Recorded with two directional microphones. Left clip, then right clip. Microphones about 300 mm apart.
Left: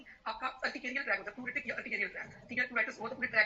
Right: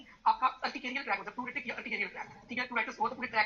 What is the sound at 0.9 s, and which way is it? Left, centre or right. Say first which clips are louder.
Speech: even; centre.